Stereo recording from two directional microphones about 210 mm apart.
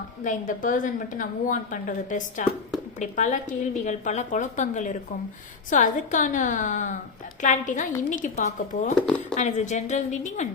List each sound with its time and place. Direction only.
0.3 s a woman's voice: 40° left (ahead or behind)